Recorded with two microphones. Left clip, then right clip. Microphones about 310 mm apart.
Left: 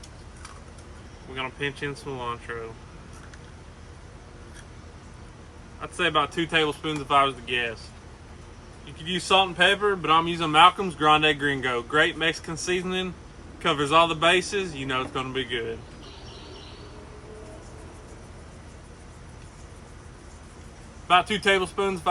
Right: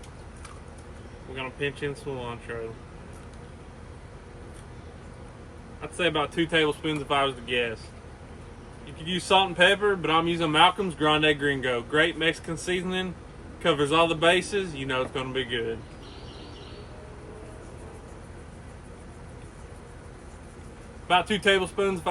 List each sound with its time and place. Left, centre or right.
1.4 s a man's voice: centre
5.8 s a man's voice: centre
9.0 s a man's voice: centre
21.1 s a man's voice: centre